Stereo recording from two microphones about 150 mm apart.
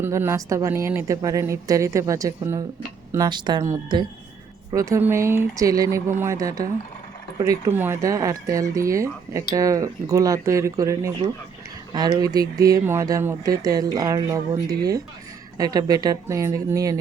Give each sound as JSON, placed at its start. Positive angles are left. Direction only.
{"t": 0.0, "sound": "a woman's voice", "side_deg": -15}
{"t": 4.7, "sound": "a woman's voice", "side_deg": -20}
{"t": 7.7, "sound": "a woman's voice", "side_deg": -15}